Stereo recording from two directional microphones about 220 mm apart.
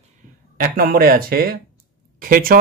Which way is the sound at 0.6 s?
40° right (ahead or behind).